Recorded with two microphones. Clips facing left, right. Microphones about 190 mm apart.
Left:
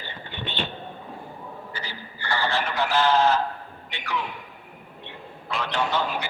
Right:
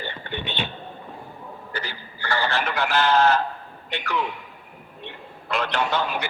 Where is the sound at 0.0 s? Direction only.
60° right (ahead or behind).